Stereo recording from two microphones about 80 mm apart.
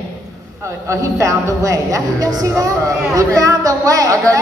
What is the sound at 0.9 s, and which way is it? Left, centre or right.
A woman's voice, right.